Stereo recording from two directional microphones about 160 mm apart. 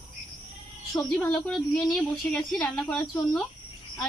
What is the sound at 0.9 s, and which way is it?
A woman's voice, 5° left (ahead or behind).